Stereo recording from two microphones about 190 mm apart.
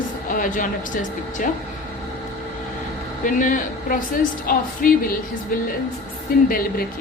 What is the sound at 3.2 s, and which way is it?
A woman's voice, 45° left (ahead or behind).